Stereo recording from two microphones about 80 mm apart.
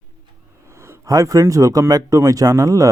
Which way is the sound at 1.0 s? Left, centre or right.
Right.